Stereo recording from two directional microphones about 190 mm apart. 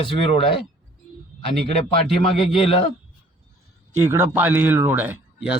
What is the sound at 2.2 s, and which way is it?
Speech, 30° left (ahead or behind).